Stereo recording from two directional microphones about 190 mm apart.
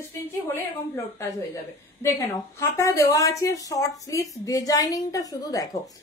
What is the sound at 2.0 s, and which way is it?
A woman's voice, 15° left (ahead or behind).